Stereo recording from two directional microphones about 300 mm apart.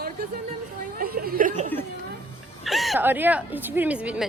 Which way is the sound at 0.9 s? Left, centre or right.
Right.